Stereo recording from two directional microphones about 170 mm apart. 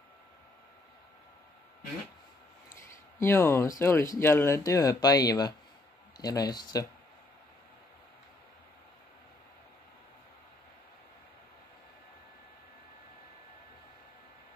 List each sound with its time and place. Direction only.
2.7 s speech: 15° left (ahead or behind)